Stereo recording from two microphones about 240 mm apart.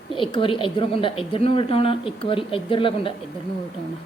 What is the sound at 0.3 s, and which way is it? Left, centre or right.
Speech, left.